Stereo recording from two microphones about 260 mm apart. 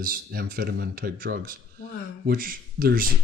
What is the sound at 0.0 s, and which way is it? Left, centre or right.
Speech, right.